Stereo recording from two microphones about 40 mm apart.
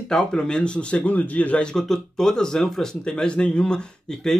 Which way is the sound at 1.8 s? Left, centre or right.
Centre.